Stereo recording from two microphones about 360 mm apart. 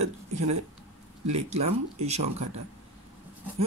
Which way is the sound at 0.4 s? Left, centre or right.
Right.